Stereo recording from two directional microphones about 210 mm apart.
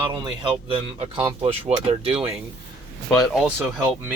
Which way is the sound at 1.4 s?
30° right (ahead or behind).